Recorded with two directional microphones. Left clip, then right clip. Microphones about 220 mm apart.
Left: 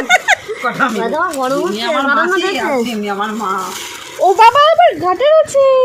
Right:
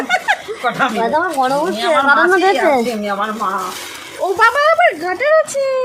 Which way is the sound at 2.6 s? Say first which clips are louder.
Right 2 dB; 15° right (ahead or behind).